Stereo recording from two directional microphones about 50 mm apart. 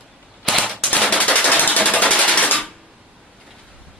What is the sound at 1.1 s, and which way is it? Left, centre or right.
Machine gun, left.